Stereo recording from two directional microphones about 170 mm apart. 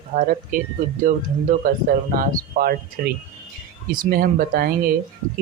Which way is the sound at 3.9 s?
55° right (ahead or behind).